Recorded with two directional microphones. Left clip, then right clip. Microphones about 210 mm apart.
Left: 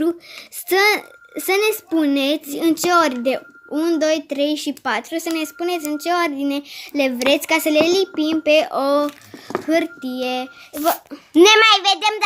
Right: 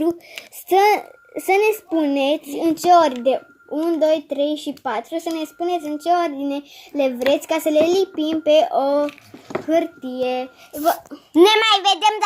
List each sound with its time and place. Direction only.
0.7 s a child's voice: 20° left (ahead or behind)
9.6 s child singing: 35° left (ahead or behind)
11.4 s a child's voice: 10° left (ahead or behind)